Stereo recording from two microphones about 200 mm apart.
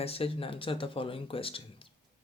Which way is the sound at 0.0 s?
30° left (ahead or behind).